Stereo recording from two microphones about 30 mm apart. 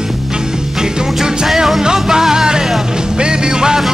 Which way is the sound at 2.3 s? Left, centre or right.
Right.